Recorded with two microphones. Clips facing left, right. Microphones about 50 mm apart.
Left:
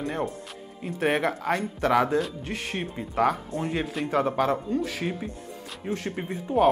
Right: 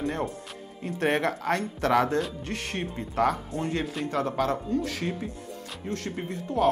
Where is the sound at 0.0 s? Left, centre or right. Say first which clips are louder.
Even; centre.